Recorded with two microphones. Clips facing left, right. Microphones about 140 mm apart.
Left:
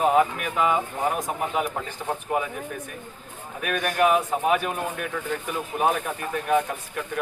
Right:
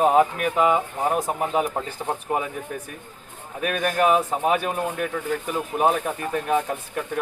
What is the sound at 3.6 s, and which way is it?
Speech, 30° right (ahead or behind).